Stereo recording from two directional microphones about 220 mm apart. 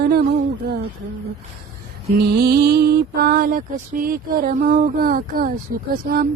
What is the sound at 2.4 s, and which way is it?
Mantra, 45° right (ahead or behind).